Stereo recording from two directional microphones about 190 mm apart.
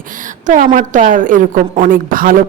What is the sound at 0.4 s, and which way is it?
A woman's voice, 40° right (ahead or behind).